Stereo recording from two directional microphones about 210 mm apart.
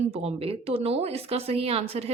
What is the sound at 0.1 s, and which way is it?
Speech, 30° right (ahead or behind).